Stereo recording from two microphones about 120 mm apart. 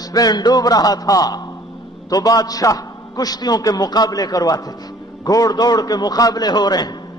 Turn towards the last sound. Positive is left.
turn(degrees=35)  # may be behind; listen again after turning